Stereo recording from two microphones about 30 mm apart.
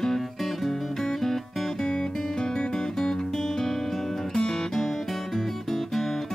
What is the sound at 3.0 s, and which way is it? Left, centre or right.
Music, centre.